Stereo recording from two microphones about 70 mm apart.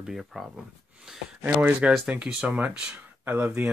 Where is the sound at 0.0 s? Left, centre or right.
Centre.